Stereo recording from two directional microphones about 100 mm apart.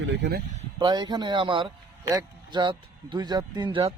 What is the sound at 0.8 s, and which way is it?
Speech, 45° right (ahead or behind).